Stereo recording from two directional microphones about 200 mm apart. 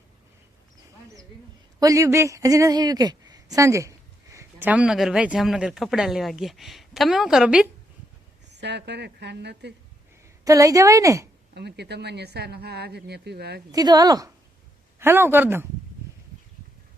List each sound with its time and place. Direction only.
1.8 s a woman's voice: 15° right (ahead or behind)
8.4 s speech: 60° right (ahead or behind)
10.4 s a woman's voice: 15° right (ahead or behind)
11.5 s speech: 55° right (ahead or behind)
13.7 s a woman's voice: 20° right (ahead or behind)